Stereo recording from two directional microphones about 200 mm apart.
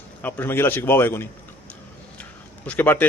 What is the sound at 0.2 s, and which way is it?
A man's voice, 10° left (ahead or behind).